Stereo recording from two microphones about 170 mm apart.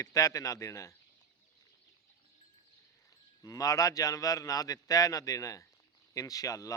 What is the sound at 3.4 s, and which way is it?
Speech, 20° left (ahead or behind).